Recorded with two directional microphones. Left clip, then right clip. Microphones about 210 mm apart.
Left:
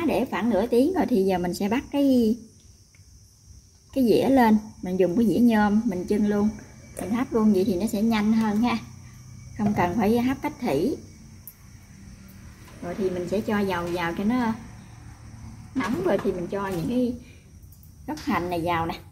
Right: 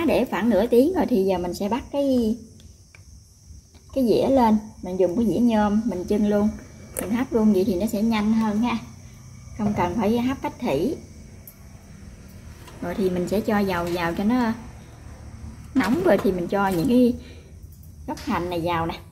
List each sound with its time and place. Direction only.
0.0 s a woman's voice: 5° right (ahead or behind); by 2.3 s 20° left (ahead or behind)
3.9 s a woman's voice: 15° left (ahead or behind)
6.0 s a woman's voice: 5° left (ahead or behind)
12.8 s a woman's voice: 20° right (ahead or behind)
15.8 s speech: 30° right (ahead or behind)
18.0 s a woman's voice: 5° left (ahead or behind)